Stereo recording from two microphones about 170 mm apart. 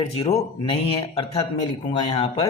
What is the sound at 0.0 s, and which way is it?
Speech, 35° left (ahead or behind).